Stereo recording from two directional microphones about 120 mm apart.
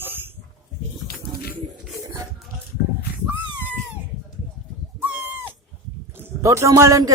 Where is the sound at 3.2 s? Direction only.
15° right (ahead or behind).